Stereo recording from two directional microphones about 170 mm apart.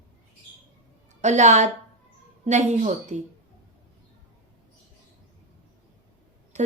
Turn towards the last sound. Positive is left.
turn(degrees=-45)  # may be behind; listen again after turning